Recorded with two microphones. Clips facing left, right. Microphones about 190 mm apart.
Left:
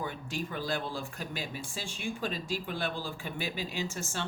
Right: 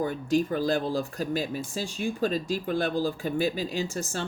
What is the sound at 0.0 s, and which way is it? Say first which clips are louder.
Speech: right 11 dB; 40° right (ahead or behind).